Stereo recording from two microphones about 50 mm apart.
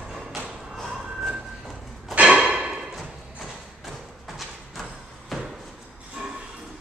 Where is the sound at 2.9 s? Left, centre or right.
Centre.